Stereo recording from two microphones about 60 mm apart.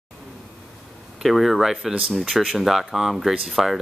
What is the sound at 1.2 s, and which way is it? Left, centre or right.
Speech, centre.